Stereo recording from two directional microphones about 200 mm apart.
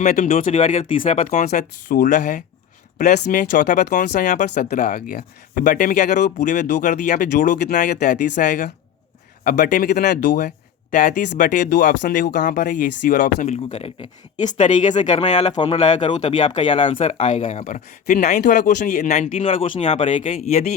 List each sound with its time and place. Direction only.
0.0 s speech: 40° left (ahead or behind)
1.5 s speech: 50° left (ahead or behind)
18.5 s speech: 50° left (ahead or behind)
19.8 s speech: 30° left (ahead or behind)